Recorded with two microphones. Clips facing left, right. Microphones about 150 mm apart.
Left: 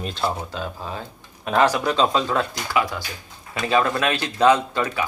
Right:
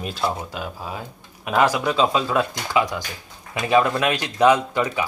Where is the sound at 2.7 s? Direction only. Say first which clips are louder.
Right 1 dB; 20° right (ahead or behind).